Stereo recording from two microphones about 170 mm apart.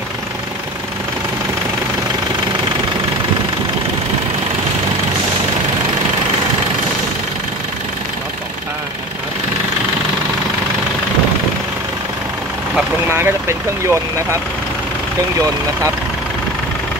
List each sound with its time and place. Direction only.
13.1 s speech: 15° right (ahead or behind)